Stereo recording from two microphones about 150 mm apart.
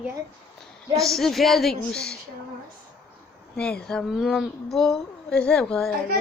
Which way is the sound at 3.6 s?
5° left (ahead or behind).